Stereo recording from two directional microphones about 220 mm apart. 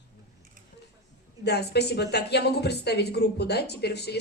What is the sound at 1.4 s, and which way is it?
Speech, 50° left (ahead or behind).